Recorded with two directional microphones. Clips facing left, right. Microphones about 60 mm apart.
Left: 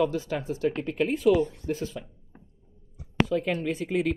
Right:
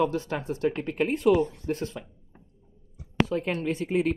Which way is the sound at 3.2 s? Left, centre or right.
Right.